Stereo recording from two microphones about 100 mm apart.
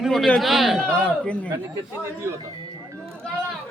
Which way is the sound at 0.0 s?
Centre (ahead or behind).